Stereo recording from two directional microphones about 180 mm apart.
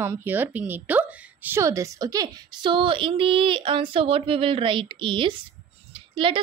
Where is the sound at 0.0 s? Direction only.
10° right (ahead or behind).